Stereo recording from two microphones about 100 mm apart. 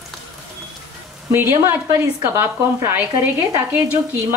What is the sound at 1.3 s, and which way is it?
A woman's voice, 25° right (ahead or behind).